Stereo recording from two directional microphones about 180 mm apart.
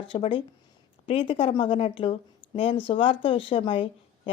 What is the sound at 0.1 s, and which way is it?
Speech, 30° left (ahead or behind).